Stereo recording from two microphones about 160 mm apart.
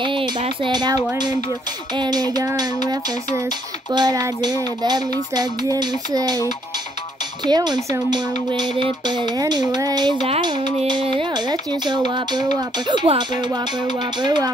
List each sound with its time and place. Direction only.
0.0 s speech: 30° right (ahead or behind)
7.4 s speech: 25° right (ahead or behind)